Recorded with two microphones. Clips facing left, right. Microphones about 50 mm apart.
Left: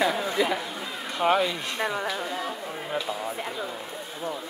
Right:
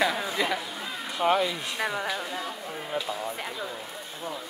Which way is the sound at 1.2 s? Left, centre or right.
Left.